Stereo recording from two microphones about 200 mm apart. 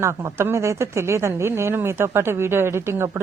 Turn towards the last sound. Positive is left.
turn(degrees=-15)  # may be behind; listen again after turning